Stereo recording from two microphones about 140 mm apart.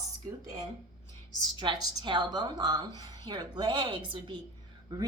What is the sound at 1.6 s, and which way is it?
A woman's voice, 30° right (ahead or behind).